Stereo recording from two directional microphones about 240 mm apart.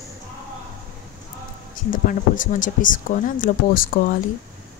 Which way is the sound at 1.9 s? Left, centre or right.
Left.